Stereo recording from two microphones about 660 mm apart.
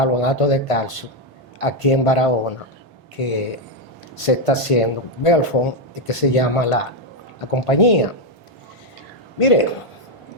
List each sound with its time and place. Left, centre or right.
0.0 s speech: left
9.4 s speech: left